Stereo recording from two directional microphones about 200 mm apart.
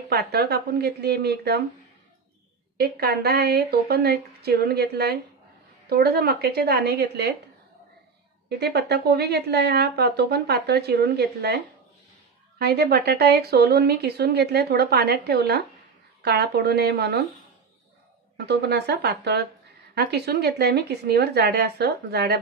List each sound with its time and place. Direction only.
0.1 s a woman's voice: 55° right (ahead or behind)
2.8 s a woman's voice: 50° right (ahead or behind)
8.5 s a woman's voice: 55° right (ahead or behind)
18.4 s speech: 55° right (ahead or behind)